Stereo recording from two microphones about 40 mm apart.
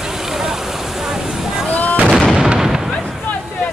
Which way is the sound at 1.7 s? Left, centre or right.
Left.